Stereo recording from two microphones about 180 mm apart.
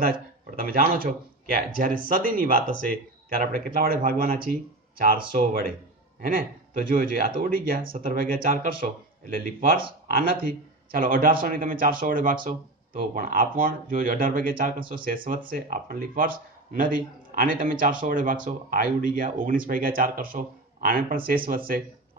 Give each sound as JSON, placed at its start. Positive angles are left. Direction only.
{"t": 0.0, "sound": "a man's voice", "side_deg": -55}